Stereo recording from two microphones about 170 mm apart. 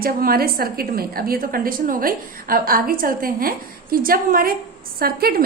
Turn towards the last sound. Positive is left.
turn(degrees=-65)  # may be behind; listen again after turning